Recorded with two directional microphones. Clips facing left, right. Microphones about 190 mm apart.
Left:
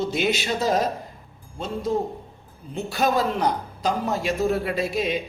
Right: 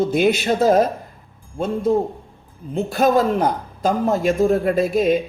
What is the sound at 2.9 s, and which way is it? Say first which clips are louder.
A man's voice: right 6 dB; 50° right (ahead or behind).